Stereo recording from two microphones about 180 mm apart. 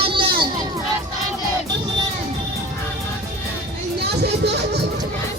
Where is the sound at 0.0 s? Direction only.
30° right (ahead or behind).